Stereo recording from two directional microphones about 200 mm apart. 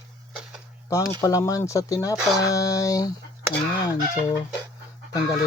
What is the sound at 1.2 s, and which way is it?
Speech, 15° left (ahead or behind).